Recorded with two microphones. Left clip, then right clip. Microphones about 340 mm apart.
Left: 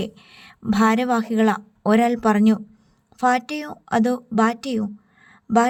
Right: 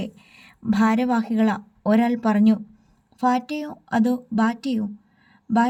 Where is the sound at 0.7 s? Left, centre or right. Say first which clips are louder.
Left 3 dB; centre.